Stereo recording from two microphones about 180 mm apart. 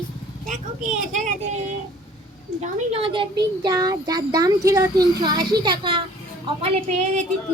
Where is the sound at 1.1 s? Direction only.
40° right (ahead or behind).